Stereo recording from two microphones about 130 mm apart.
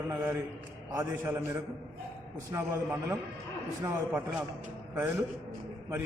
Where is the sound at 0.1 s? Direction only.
15° right (ahead or behind).